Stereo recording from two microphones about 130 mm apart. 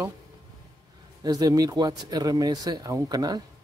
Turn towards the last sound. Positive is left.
turn(degrees=-30)  # may be behind; listen again after turning